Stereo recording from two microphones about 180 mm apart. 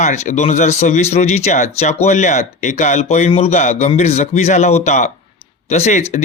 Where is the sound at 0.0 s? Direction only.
40° left (ahead or behind).